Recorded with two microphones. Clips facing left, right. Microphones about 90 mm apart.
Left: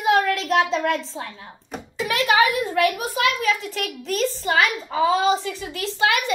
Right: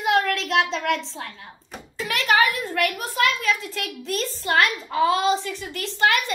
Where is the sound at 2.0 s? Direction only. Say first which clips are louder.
Left 2 dB; 15° left (ahead or behind).